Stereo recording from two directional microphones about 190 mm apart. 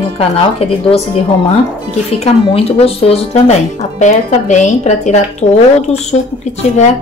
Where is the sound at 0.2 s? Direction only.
30° left (ahead or behind).